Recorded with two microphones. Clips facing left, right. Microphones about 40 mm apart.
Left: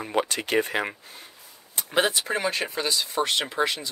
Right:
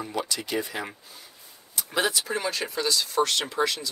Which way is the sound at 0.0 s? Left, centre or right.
Left.